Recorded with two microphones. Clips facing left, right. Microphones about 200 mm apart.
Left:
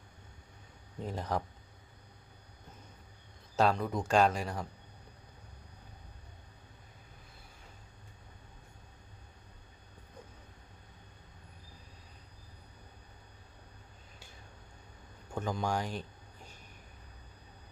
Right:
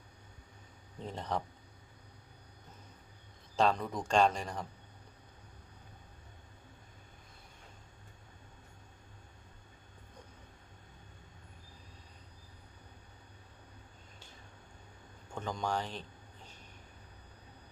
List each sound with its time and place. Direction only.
0.9 s speech: 5° left (ahead or behind)
3.5 s speech: 5° left (ahead or behind)
15.4 s a sound: 10° left (ahead or behind)